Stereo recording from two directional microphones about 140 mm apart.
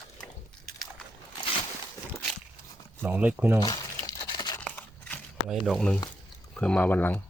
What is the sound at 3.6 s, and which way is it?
Speech, 30° left (ahead or behind).